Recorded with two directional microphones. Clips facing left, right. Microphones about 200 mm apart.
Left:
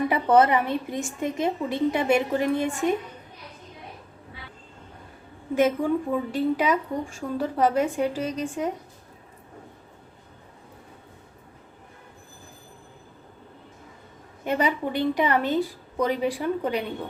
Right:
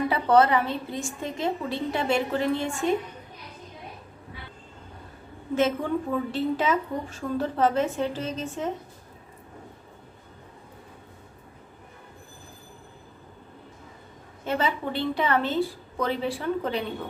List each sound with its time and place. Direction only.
0.1 s a woman's voice: 20° left (ahead or behind)
5.5 s a woman's voice: 10° left (ahead or behind)
14.4 s a woman's voice: 15° left (ahead or behind)